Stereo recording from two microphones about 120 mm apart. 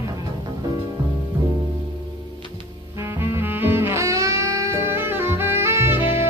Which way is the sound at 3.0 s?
20° right (ahead or behind).